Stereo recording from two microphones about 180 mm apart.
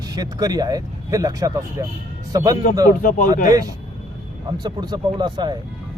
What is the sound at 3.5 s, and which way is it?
Speech, 20° right (ahead or behind).